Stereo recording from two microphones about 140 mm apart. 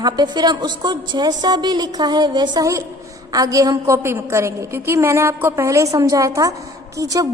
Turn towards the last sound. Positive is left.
turn(degrees=-25)  # may be behind; listen again after turning